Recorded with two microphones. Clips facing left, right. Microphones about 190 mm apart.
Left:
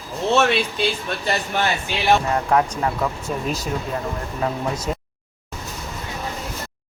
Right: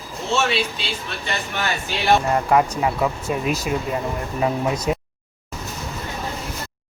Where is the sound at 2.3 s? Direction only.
5° right (ahead or behind).